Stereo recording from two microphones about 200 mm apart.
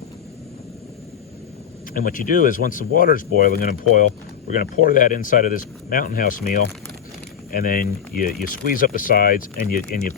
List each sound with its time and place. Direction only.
1.9 s speech: 45° left (ahead or behind)